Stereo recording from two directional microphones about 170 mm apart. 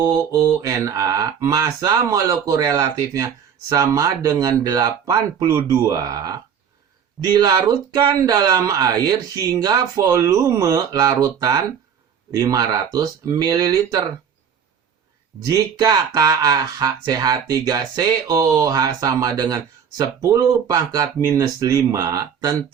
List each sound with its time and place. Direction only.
0.0 s speech: 20° right (ahead or behind)
15.4 s speech: 20° right (ahead or behind)